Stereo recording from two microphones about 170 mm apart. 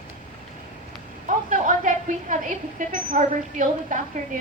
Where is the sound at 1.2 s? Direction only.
50° right (ahead or behind).